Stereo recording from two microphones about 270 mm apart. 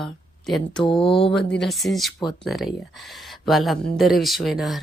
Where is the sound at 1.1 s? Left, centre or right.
Centre.